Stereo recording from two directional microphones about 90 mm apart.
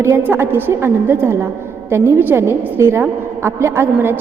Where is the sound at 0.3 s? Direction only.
25° right (ahead or behind).